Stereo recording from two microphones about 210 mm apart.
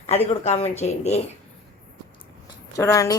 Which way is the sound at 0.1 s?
30° left (ahead or behind).